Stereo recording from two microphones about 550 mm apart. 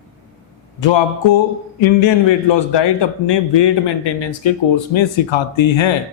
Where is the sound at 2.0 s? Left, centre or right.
Left.